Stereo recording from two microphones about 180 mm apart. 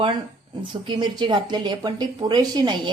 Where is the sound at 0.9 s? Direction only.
25° right (ahead or behind).